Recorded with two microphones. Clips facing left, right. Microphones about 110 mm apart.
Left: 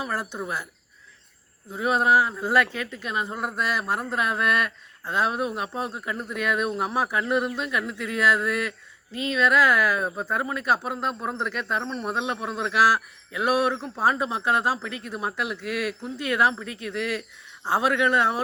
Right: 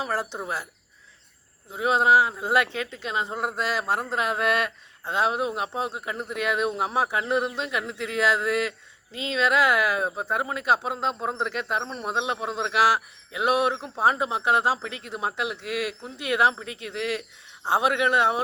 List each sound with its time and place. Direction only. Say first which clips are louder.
0.0 s speech: right 1 dB; 30° right (ahead or behind)
1.7 s speech: right 1 dB; 25° right (ahead or behind)